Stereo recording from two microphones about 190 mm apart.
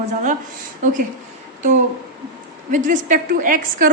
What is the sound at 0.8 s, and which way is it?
Speech, 40° right (ahead or behind).